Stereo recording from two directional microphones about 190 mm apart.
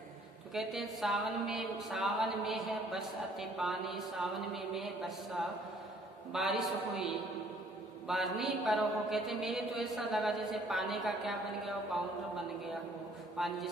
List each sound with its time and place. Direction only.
0.6 s speech: centre (ahead or behind)
8.1 s speech: centre (ahead or behind)
13.4 s speech: centre (ahead or behind)